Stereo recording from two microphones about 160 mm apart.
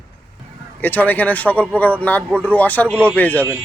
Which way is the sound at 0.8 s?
10° left (ahead or behind).